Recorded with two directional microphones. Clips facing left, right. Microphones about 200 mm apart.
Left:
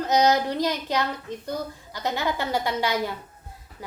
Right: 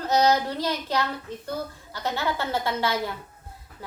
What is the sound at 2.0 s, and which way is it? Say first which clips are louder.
Speech: left 1 dB; 15° left (ahead or behind).